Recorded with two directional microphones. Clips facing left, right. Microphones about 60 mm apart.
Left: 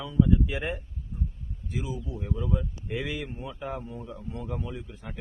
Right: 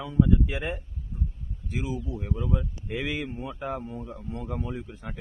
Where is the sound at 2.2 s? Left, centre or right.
Right.